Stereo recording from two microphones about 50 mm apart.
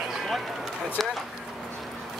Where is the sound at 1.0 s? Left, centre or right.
Centre.